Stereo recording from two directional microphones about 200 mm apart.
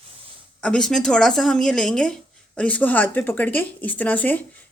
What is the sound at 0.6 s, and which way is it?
Speech, 5° left (ahead or behind).